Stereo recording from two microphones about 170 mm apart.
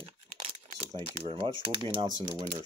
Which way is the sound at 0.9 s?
30° right (ahead or behind).